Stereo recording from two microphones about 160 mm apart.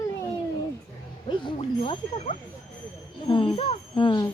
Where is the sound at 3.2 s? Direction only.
35° left (ahead or behind).